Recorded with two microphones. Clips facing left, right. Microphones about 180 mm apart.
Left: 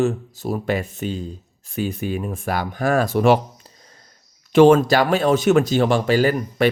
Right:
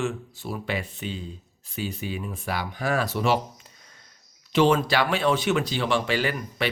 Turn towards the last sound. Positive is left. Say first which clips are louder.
# left 9 dB
turn(degrees=45)  # may be behind; listen again after turning